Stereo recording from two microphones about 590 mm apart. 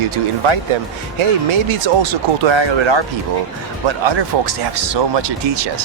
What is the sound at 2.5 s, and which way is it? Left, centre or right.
Speech, right.